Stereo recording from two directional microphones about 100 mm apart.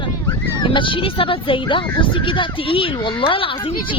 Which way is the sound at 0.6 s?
55° left (ahead or behind).